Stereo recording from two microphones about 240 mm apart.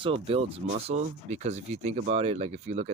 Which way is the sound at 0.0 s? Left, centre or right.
Right.